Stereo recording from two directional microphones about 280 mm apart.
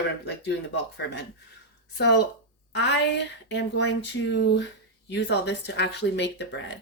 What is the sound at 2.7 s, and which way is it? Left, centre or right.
Speech, left.